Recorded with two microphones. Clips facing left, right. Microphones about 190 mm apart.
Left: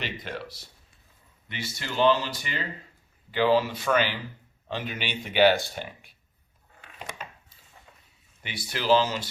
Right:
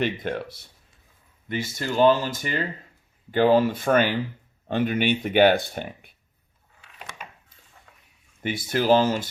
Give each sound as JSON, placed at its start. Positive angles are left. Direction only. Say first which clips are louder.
{"t": 0.0, "sound": "speech", "louder": "right 9 dB", "side_deg": -50}
{"t": 8.4, "sound": "speech", "louder": "right 9 dB", "side_deg": -50}